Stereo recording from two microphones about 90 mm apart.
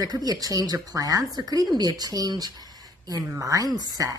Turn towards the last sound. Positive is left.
turn(degrees=-45)  # may be behind; listen again after turning